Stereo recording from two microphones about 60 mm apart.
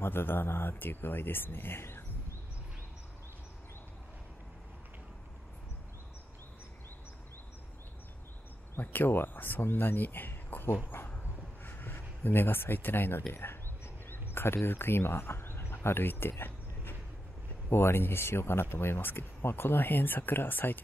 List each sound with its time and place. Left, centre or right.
0.0 s speech: left
8.7 s speech: left
10.9 s dog: left
11.6 s speech: left